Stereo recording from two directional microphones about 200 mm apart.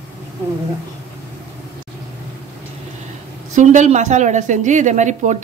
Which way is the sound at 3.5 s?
40° right (ahead or behind).